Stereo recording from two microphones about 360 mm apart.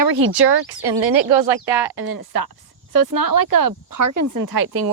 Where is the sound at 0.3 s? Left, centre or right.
Right.